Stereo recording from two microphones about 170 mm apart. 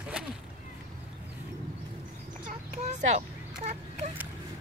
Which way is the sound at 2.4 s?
45° right (ahead or behind).